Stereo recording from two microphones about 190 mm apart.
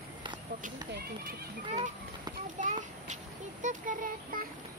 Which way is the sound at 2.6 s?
40° right (ahead or behind).